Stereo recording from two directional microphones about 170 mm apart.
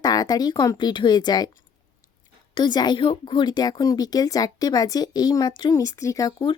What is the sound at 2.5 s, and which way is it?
Speech, 25° left (ahead or behind).